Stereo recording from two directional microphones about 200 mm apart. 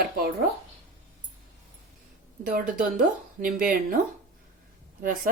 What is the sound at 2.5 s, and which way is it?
A woman's voice, 40° right (ahead or behind).